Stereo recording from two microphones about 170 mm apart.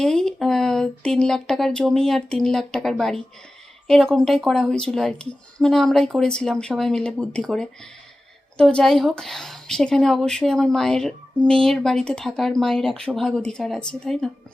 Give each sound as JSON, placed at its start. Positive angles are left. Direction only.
{"t": 0.0, "sound": "a woman's voice", "side_deg": 5}